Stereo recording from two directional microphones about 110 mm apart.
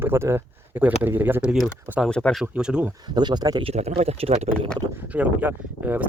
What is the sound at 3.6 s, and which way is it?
Speech, 70° right (ahead or behind).